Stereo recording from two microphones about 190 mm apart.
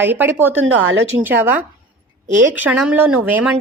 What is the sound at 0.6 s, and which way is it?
Speech, 90° right.